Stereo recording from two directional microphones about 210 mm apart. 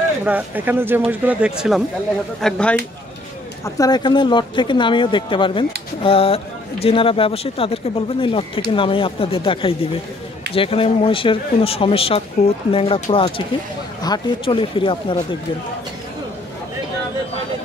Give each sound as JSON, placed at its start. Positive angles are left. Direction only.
{"t": 0.2, "sound": "speech", "side_deg": -10}
{"t": 3.6, "sound": "speech", "side_deg": 15}